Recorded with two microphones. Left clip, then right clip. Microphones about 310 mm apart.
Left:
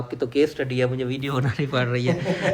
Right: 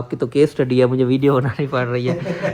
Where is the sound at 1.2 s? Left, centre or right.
Centre.